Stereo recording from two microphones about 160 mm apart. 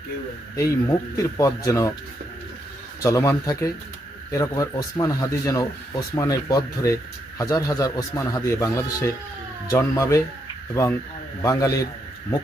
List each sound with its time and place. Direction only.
0.5 s speech: 20° left (ahead or behind)
3.0 s speech: 20° left (ahead or behind)